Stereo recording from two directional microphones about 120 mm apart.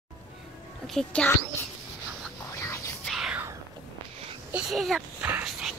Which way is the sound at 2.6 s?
25° left (ahead or behind).